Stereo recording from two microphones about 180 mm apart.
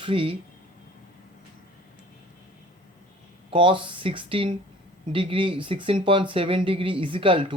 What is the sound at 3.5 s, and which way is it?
Speech, 30° right (ahead or behind).